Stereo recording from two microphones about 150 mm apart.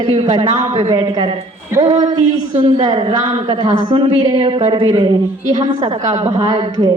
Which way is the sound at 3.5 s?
25° right (ahead or behind).